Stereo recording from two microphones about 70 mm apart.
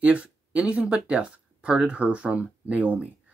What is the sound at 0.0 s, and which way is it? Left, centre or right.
Speech, centre.